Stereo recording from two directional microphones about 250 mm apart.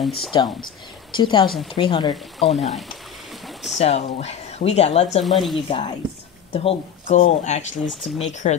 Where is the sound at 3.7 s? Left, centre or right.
Left.